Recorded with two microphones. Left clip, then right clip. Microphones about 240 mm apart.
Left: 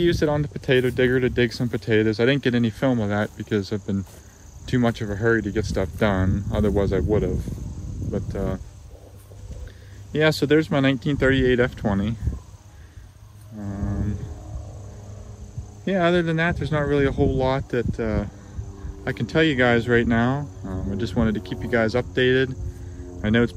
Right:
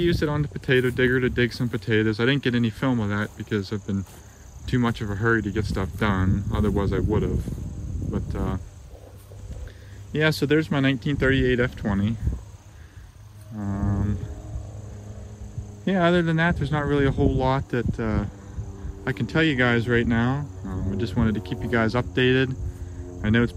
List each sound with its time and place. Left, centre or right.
0.0 s speech: centre
10.1 s speech: centre
13.7 s a sound: centre
15.8 s speech: centre